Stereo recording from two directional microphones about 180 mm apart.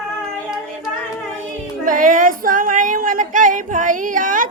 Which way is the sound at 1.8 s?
45° right (ahead or behind).